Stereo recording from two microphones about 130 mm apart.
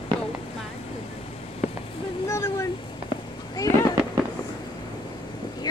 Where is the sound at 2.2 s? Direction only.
20° left (ahead or behind).